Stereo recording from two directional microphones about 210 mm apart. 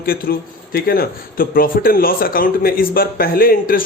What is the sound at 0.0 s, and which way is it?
A man's voice, 45° left (ahead or behind).